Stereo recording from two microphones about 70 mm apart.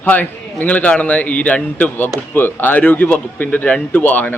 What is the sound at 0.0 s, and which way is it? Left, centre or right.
Speech, left.